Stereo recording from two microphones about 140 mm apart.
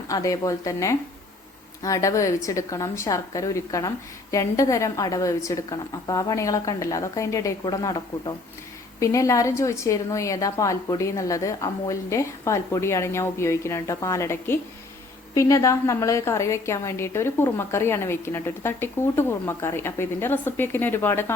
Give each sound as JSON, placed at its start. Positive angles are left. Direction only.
{"t": 0.1, "sound": "a woman's voice", "side_deg": 25}